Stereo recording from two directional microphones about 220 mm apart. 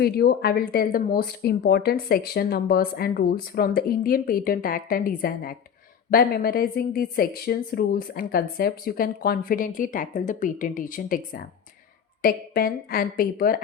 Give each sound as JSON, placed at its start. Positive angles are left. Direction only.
{"t": 0.0, "sound": "a woman's voice", "side_deg": 45}